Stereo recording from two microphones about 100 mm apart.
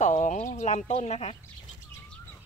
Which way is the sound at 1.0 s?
90° left.